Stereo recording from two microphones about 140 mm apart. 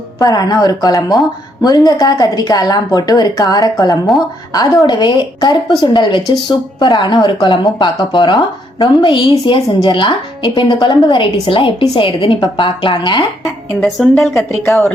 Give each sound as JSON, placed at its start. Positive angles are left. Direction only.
{"t": 0.2, "sound": "a woman's voice", "side_deg": 25}
{"t": 13.4, "sound": "a woman's voice", "side_deg": 0}